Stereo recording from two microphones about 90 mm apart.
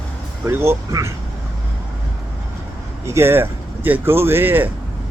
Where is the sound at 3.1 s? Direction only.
30° right (ahead or behind).